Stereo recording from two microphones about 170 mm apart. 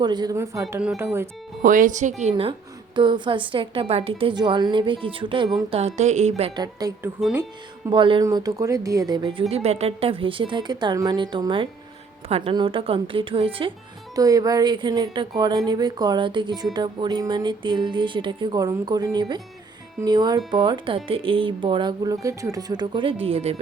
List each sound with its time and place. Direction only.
0.0 s a woman's voice: 25° right (ahead or behind)
1.6 s speech: 50° right (ahead or behind)
2.3 s a woman's voice: 30° right (ahead or behind)
6.6 s a woman's voice: 20° right (ahead or behind)
9.5 s a woman's voice: 40° right (ahead or behind)
14.2 s a woman's voice: 20° right (ahead or behind); by 23.6 s 35° right (ahead or behind)